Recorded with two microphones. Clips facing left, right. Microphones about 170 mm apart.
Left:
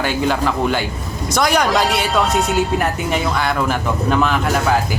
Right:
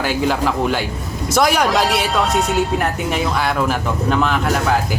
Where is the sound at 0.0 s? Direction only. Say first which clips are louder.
Even; 5° right (ahead or behind).